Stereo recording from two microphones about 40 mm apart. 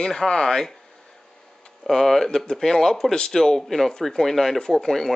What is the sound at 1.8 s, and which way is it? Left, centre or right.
Speech, centre.